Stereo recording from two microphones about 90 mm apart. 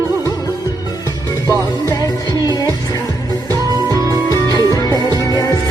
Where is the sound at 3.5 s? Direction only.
40° right (ahead or behind).